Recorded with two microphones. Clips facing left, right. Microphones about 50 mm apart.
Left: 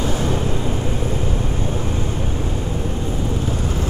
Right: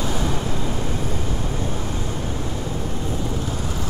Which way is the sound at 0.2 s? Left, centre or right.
Centre.